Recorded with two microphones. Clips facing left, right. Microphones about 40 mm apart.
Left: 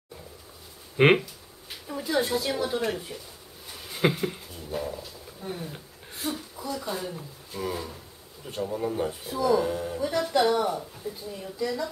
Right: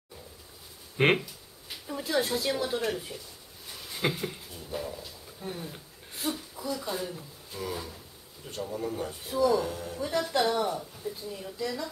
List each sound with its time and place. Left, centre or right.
0.9 s speech: centre
9.2 s a woman's voice: centre
9.6 s speech: centre
9.9 s a woman's voice: centre